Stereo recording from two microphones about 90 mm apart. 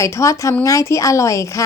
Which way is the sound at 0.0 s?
35° left (ahead or behind).